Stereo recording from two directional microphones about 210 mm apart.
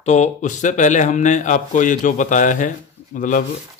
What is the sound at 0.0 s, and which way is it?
Speech, 35° left (ahead or behind).